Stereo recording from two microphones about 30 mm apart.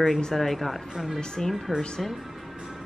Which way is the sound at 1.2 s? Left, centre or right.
Left.